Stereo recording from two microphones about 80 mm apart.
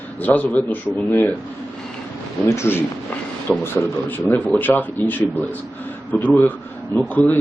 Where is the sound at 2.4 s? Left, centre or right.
Left.